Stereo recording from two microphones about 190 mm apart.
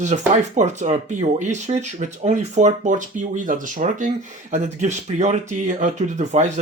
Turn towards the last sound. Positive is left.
turn(degrees=-40)  # may be behind; listen again after turning